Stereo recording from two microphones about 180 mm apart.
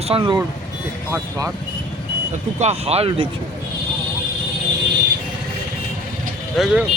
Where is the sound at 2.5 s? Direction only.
35° right (ahead or behind).